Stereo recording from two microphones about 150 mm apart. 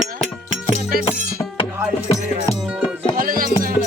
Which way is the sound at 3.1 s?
70° right (ahead or behind).